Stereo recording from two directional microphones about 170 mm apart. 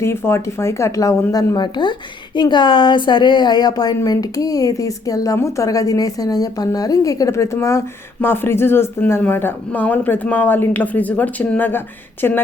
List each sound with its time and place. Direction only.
0.0 s speech: 15° left (ahead or behind)